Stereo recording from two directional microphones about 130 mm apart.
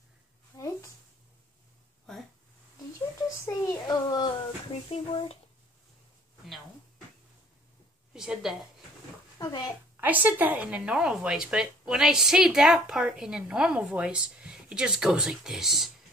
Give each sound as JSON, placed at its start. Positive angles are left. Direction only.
{"t": 0.6, "sound": "a sound", "side_deg": 25}
{"t": 2.1, "sound": "a sound", "side_deg": 5}
{"t": 3.2, "sound": "a child's voice", "side_deg": 20}
{"t": 4.8, "sound": "speech", "side_deg": 45}
{"t": 8.1, "sound": "a woman's voice", "side_deg": -5}
{"t": 9.4, "sound": "speech", "side_deg": 30}
{"t": 9.9, "sound": "a woman's voice", "side_deg": -15}